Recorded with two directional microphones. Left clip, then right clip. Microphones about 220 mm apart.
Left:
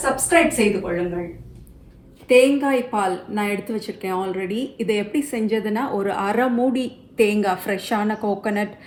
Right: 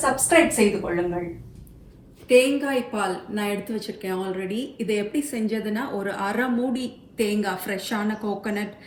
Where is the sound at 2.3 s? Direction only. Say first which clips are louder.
Left 3 dB; 25° left (ahead or behind).